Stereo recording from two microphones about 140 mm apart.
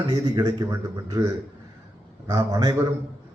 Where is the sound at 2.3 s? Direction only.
30° right (ahead or behind).